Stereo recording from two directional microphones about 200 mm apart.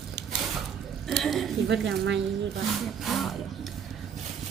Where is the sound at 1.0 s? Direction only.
Centre (ahead or behind).